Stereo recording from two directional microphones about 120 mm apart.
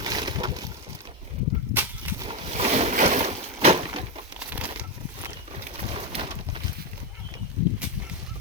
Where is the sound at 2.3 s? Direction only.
60° right (ahead or behind); by 3.3 s 90° right.